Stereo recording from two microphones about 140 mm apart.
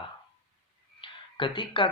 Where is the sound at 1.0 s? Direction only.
35° left (ahead or behind).